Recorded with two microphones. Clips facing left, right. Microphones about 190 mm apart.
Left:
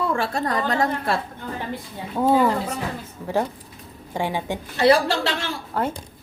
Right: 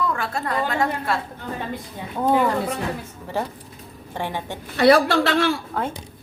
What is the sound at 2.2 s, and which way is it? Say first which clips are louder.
Speech: left 1 dB; 10° left (ahead or behind).